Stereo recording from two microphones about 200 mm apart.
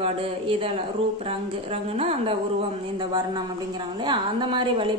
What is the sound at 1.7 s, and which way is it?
A woman's voice, 30° right (ahead or behind).